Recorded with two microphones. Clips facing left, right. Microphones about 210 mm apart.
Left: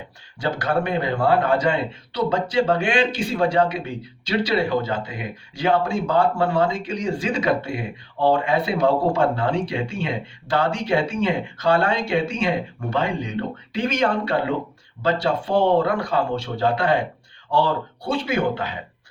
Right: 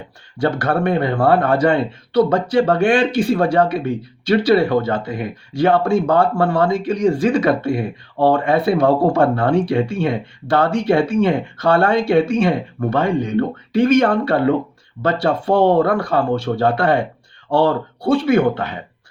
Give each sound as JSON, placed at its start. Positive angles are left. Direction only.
{"t": 0.3, "sound": "speech", "side_deg": -55}